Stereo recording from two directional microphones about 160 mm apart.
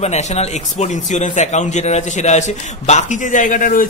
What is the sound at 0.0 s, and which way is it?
A man's voice, 40° left (ahead or behind).